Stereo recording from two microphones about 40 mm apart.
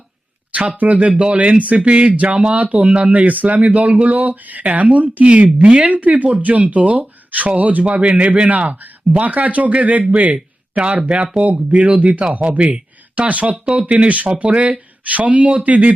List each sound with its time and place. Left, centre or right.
0.8 s speech: right
4.1 s a sound: right
4.7 s speech: right
7.9 s speech: right
10.3 s a sound: right
11.3 s speech: right